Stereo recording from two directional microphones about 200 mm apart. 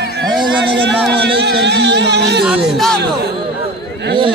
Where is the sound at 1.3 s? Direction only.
60° right (ahead or behind).